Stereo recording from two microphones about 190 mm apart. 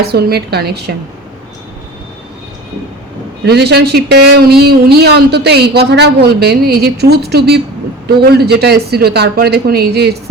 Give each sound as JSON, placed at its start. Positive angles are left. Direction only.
{"t": 0.1, "sound": "speech", "side_deg": -55}
{"t": 3.4, "sound": "speech", "side_deg": -60}